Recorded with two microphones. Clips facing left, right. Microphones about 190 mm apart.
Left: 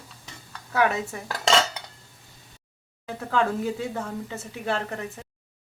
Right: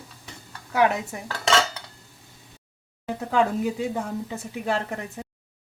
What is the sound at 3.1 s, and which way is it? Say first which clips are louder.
A woman's voice: right 2 dB; 15° right (ahead or behind).